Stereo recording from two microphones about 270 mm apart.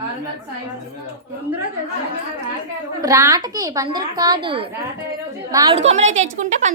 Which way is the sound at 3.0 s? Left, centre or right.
Centre.